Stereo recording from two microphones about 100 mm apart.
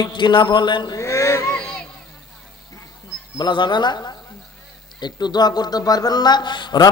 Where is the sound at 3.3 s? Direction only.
50° left (ahead or behind).